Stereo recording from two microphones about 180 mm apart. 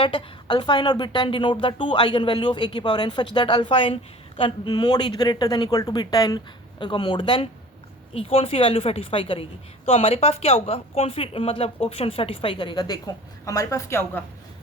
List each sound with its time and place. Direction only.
0.0 s a woman's voice: 30° left (ahead or behind); by 14.3 s 10° left (ahead or behind)